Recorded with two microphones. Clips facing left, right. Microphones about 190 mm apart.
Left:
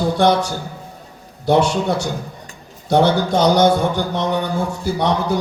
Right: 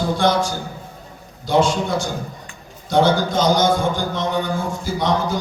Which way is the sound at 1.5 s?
65° left (ahead or behind).